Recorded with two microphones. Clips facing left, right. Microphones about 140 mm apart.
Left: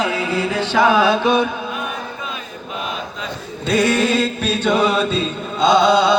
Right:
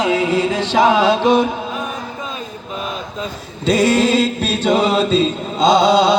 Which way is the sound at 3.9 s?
30° right (ahead or behind).